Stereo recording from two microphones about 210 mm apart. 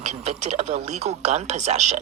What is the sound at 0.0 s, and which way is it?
Speech, 30° right (ahead or behind).